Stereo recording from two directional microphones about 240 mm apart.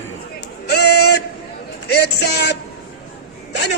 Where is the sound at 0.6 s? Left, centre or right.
Left.